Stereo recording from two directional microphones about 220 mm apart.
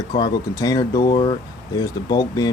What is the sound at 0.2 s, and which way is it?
Speech, 15° left (ahead or behind).